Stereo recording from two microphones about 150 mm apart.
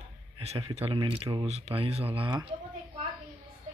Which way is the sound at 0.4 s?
45° right (ahead or behind).